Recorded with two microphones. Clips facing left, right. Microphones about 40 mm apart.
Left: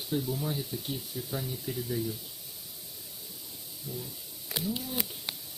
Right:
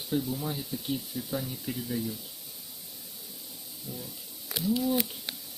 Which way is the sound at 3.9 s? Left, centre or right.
Right.